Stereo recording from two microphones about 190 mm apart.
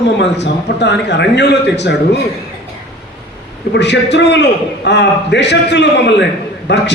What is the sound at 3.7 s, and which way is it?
Speech, 65° left (ahead or behind).